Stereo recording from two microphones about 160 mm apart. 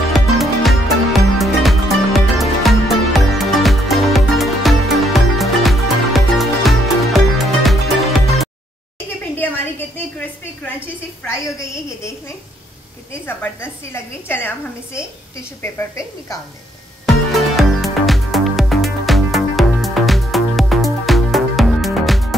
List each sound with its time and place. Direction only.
0.1 s music: centre (ahead or behind)
9.4 s a sound: 10° left (ahead or behind)
13.2 s a woman's voice: 15° left (ahead or behind)
15.6 s a woman's voice: 15° left (ahead or behind)
17.0 s music: centre (ahead or behind)